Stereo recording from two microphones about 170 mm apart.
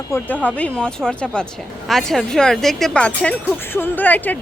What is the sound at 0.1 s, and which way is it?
Speech, 15° left (ahead or behind).